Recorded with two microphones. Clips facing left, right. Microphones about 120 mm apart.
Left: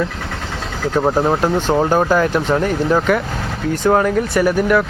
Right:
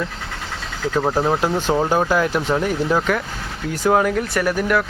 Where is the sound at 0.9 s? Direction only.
25° left (ahead or behind).